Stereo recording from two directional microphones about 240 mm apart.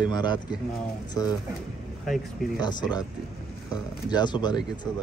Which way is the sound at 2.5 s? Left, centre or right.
Centre.